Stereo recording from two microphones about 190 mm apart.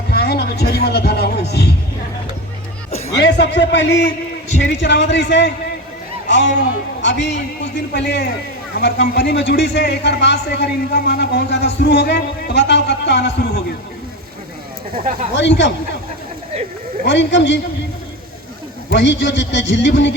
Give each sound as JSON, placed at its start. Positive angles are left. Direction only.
{"t": 0.1, "sound": "music", "side_deg": 60}
{"t": 3.2, "sound": "a man's voice", "side_deg": 65}
{"t": 15.4, "sound": "a man's voice", "side_deg": 65}
{"t": 17.1, "sound": "a man's voice", "side_deg": 70}
{"t": 18.9, "sound": "a man's voice", "side_deg": 70}